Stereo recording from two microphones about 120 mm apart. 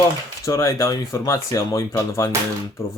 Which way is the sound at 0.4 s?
25° left (ahead or behind).